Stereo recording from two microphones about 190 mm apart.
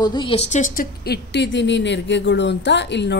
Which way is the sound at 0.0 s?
25° left (ahead or behind).